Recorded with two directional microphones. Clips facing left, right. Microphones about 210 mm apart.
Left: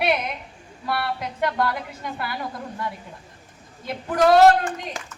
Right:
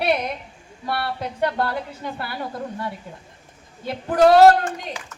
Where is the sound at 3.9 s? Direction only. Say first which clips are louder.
Right 3 dB; 30° right (ahead or behind).